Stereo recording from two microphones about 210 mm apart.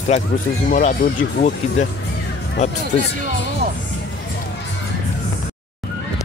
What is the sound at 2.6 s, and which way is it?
Speech, 35° left (ahead or behind).